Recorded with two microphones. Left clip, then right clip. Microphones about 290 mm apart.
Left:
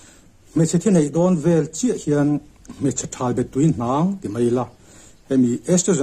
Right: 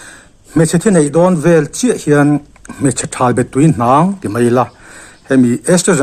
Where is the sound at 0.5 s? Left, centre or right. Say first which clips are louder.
Right 8 dB; right.